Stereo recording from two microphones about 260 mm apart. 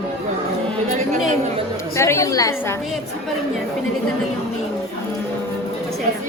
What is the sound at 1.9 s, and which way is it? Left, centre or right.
Speech, centre.